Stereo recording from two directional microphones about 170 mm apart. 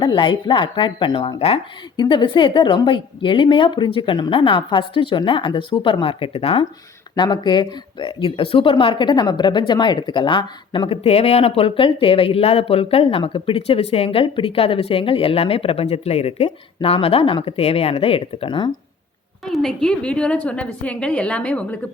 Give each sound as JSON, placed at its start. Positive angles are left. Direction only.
{"t": 0.0, "sound": "speech", "side_deg": 25}
{"t": 19.5, "sound": "a woman's voice", "side_deg": 0}